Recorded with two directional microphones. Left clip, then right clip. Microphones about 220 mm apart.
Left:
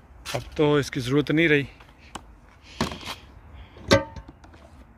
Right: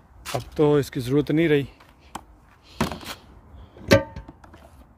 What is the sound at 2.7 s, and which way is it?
Thunk, 25° right (ahead or behind).